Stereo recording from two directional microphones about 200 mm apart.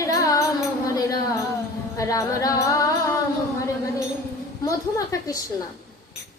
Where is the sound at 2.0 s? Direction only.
15° left (ahead or behind).